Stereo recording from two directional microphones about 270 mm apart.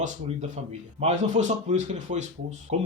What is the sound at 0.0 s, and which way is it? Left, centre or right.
A man's voice, right.